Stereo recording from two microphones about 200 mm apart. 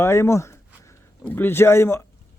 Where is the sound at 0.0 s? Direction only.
15° left (ahead or behind).